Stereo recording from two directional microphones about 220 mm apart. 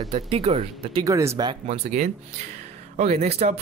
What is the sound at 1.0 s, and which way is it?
Speech, 15° right (ahead or behind).